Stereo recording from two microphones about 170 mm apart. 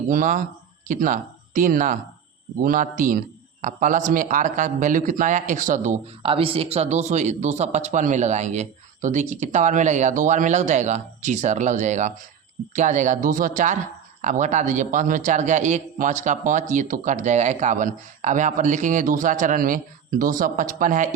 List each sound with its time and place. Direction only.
0.1 s a man's voice: 50° right (ahead or behind)